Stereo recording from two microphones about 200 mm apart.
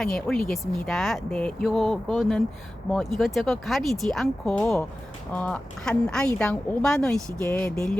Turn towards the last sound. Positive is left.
turn(degrees=5)  # may be behind; listen again after turning